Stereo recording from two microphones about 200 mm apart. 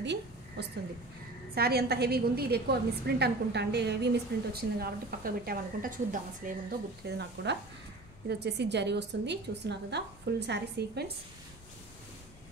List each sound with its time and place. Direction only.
0.0 s a sound: 60° right (ahead or behind)
1.5 s a woman's voice: 50° right (ahead or behind)
7.1 s a woman's voice: 55° right (ahead or behind)